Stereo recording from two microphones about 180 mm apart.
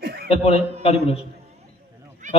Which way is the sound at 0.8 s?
35° left (ahead or behind).